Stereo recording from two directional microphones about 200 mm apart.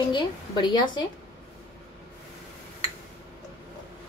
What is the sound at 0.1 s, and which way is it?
Speech, 20° left (ahead or behind).